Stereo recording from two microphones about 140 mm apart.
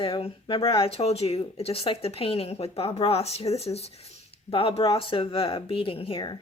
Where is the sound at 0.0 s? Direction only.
40° left (ahead or behind).